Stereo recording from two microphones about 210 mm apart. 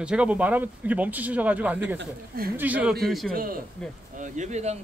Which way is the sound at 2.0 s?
45° right (ahead or behind).